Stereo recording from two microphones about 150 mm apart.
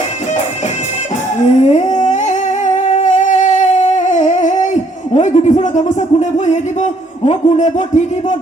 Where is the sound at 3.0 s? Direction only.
55° left (ahead or behind).